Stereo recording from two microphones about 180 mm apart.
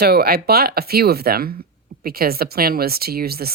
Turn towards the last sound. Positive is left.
turn(degrees=-60)  # may be behind; listen again after turning